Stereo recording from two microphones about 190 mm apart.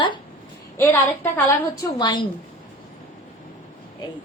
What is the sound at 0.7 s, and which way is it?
A woman's voice, 10° left (ahead or behind).